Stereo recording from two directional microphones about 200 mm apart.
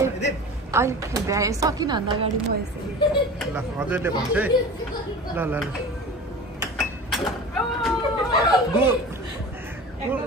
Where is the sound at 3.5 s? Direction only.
10° right (ahead or behind).